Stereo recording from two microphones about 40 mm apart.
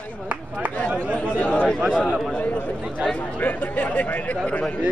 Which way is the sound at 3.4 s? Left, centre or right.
Left.